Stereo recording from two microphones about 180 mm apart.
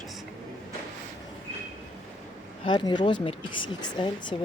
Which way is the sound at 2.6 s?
25° left (ahead or behind).